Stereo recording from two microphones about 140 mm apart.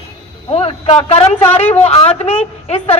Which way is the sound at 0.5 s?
45° left (ahead or behind).